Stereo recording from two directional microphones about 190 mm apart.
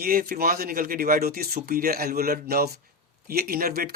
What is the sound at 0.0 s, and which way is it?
A man's voice, 50° right (ahead or behind).